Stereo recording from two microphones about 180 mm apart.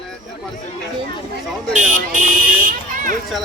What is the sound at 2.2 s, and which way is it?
Buzzer, 50° right (ahead or behind).